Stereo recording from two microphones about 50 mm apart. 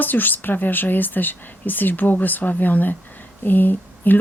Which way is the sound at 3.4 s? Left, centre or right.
Left.